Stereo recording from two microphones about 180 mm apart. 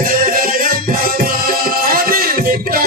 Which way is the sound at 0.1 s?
50° right (ahead or behind).